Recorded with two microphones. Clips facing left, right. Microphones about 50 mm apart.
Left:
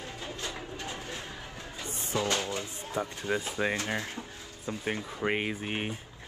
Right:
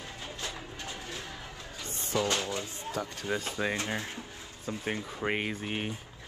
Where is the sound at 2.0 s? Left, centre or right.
Left.